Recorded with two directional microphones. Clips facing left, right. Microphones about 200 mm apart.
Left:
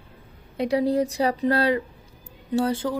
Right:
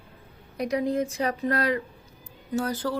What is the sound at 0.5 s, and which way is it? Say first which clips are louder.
A woman's voice: left 4 dB; 30° left (ahead or behind).